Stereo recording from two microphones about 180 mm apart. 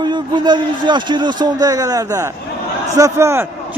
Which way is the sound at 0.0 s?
25° right (ahead or behind).